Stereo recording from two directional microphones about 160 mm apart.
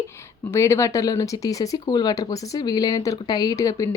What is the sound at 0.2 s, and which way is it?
Speech, 15° left (ahead or behind).